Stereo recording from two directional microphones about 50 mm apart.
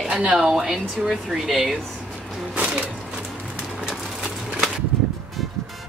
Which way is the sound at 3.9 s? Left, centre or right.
Centre.